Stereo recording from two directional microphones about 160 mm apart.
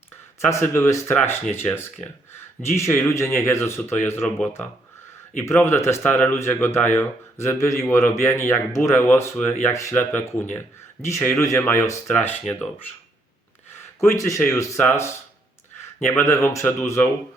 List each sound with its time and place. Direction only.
0.4 s speech: 15° left (ahead or behind)
5.4 s speech: 15° left (ahead or behind)